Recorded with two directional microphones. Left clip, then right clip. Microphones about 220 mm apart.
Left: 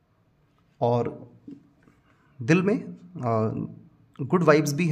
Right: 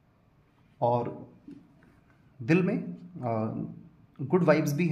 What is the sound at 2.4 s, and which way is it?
A man's voice, 40° left (ahead or behind).